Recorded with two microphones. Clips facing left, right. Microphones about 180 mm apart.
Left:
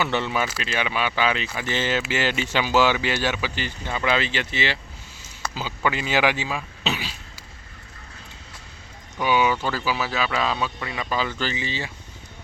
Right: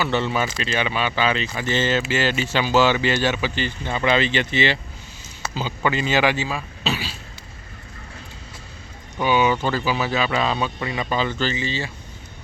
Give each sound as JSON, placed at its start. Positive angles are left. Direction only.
{"t": 0.0, "sound": "speech", "side_deg": 15}
{"t": 6.8, "sound": "throat clearing", "side_deg": 15}
{"t": 9.2, "sound": "speech", "side_deg": 10}